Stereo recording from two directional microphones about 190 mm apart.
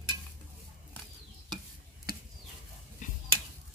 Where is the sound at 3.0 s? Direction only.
40° left (ahead or behind).